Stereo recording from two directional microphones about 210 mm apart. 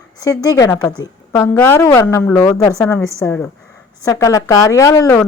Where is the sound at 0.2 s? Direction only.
15° left (ahead or behind).